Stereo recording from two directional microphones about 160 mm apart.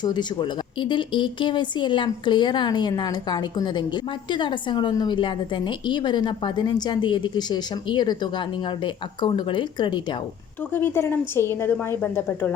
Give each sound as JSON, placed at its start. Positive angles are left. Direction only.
{"t": 0.0, "sound": "speech", "side_deg": 25}
{"t": 10.7, "sound": "a woman's voice", "side_deg": 15}